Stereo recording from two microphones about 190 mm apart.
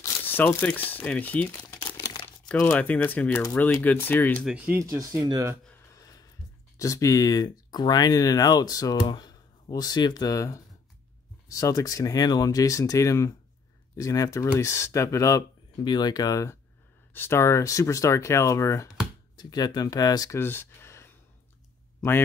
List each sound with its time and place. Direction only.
0.0 s speech: 10° left (ahead or behind)
1.7 s crumpling: 15° left (ahead or behind)
2.4 s speech: 5° left (ahead or behind)
4.5 s speech: 5° right (ahead or behind)
4.8 s speech: 20° right (ahead or behind)
6.8 s speech: 15° left (ahead or behind)